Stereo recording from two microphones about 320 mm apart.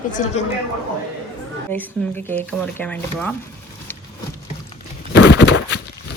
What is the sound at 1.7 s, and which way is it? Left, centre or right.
Speech, centre.